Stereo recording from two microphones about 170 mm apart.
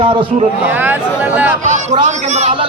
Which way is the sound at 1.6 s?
45° right (ahead or behind).